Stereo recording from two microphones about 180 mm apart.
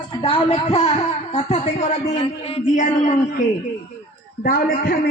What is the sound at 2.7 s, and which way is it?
Speech, 45° left (ahead or behind).